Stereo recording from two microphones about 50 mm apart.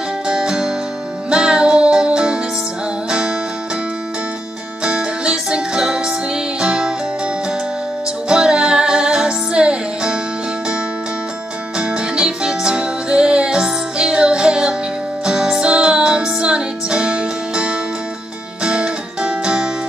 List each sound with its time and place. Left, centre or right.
0.3 s music: centre
4.8 s music: centre
8.3 s music: centre
11.8 s music: centre